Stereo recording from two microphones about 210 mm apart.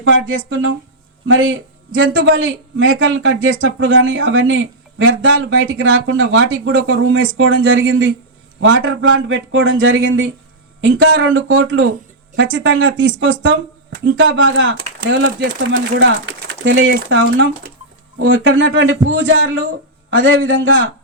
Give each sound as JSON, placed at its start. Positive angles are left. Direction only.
{"t": 0.0, "sound": "speech", "side_deg": -65}